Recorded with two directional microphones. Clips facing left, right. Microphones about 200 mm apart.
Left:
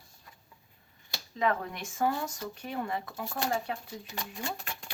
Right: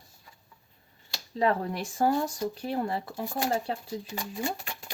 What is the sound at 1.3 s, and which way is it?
Speech, 35° right (ahead or behind).